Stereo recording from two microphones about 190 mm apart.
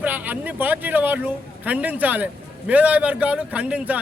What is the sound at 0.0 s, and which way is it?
Speech, 10° right (ahead or behind).